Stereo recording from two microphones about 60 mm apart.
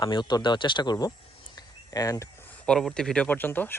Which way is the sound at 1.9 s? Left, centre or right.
Left.